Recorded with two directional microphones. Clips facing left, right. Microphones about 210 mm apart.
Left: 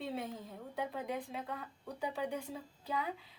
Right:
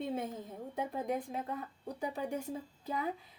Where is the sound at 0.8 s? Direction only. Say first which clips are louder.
Right 3 dB; 45° right (ahead or behind).